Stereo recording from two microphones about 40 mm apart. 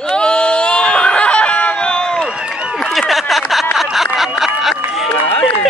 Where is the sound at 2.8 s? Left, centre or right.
Centre.